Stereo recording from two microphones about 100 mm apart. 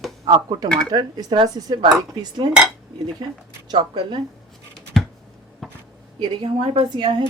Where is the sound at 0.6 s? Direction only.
10° left (ahead or behind).